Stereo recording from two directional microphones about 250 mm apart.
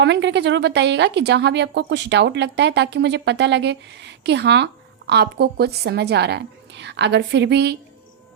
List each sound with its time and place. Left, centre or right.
0.0 s a woman's voice: right